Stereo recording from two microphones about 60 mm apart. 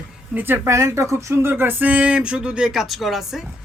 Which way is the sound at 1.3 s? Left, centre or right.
Right.